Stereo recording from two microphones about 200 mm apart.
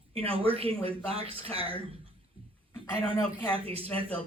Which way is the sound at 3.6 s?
30° right (ahead or behind).